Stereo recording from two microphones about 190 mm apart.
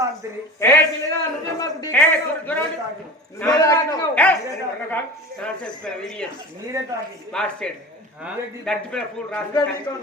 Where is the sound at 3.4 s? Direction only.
20° left (ahead or behind).